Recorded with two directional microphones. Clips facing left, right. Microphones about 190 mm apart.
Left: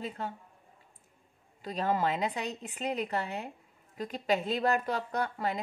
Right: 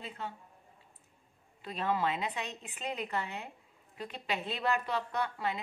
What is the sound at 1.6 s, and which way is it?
A woman's voice, 40° left (ahead or behind).